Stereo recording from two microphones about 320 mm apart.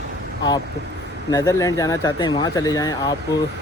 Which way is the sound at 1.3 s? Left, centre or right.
Centre.